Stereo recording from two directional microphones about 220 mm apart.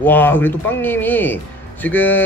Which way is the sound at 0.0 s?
10° left (ahead or behind).